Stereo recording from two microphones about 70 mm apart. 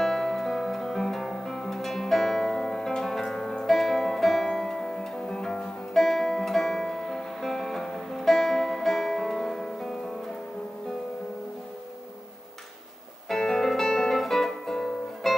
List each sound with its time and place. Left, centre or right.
0.0 s music: centre
13.3 s music: centre